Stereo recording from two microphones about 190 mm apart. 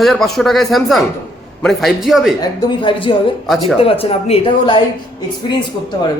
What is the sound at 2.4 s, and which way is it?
A man's voice, 20° left (ahead or behind).